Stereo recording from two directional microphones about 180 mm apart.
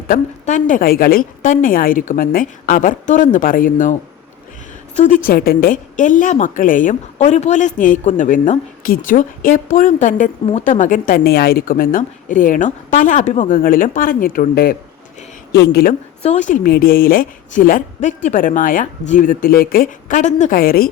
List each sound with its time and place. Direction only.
0.1 s a woman's voice: 45° left (ahead or behind)
4.9 s a woman's voice: 45° left (ahead or behind)
16.2 s a woman's voice: 40° left (ahead or behind)